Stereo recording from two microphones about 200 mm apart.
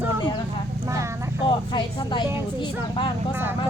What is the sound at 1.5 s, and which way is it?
Speech, 25° left (ahead or behind).